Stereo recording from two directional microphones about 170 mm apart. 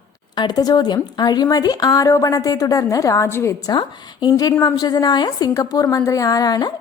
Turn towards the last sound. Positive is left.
turn(degrees=25)  # may be behind; listen again after turning